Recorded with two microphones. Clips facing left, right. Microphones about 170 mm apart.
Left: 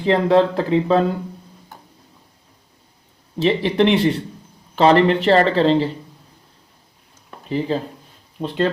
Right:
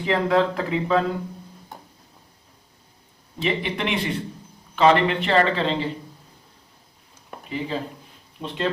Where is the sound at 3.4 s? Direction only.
35° left (ahead or behind).